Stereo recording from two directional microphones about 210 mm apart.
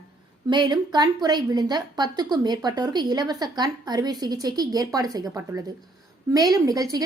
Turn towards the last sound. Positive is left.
turn(degrees=-15)  # may be behind; listen again after turning